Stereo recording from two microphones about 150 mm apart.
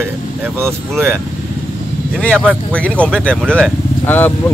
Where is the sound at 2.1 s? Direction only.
5° left (ahead or behind).